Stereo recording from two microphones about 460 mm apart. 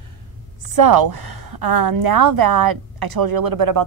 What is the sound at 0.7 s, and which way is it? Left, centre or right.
A woman's voice, right.